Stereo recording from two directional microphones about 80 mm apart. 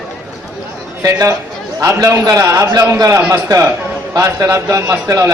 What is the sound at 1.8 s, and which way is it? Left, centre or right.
Speech, right.